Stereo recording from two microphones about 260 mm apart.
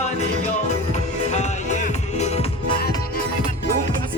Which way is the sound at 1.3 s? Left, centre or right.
Left.